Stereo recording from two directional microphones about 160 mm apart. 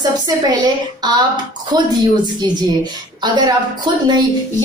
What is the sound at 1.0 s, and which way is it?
Speech, 25° right (ahead or behind).